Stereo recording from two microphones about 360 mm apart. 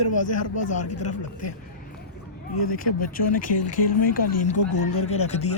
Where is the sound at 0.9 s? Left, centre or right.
Left.